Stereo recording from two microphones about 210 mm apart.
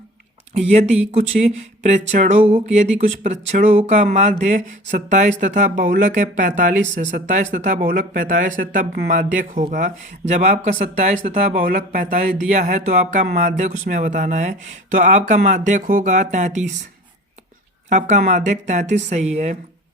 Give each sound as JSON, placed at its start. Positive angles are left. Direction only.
{"t": 0.5, "sound": "speech", "side_deg": -30}
{"t": 17.8, "sound": "speech", "side_deg": -35}